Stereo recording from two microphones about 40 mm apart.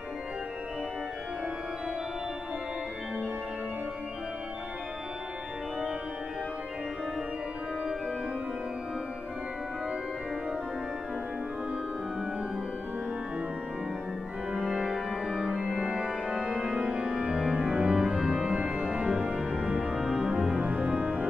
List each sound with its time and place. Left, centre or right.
14.6 s music: centre
15.8 s organ: right
18.0 s music: centre
20.6 s music: right
20.9 s organ: right